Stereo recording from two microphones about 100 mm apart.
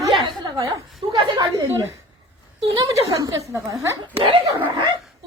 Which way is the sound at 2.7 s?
40° right (ahead or behind).